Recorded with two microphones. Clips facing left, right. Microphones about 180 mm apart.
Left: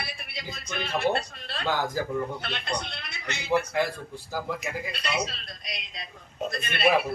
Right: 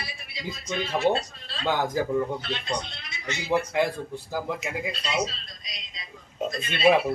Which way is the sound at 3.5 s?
20° right (ahead or behind).